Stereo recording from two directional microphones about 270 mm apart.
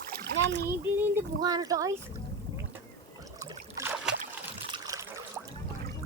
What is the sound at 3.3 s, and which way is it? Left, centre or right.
Boat, centre.